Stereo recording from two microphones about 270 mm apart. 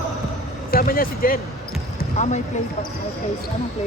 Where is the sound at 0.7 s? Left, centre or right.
Left.